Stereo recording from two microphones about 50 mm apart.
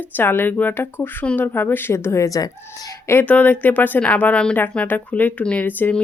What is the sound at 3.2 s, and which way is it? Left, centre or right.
Speech, left.